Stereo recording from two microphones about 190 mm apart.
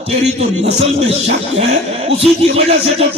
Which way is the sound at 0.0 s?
35° right (ahead or behind).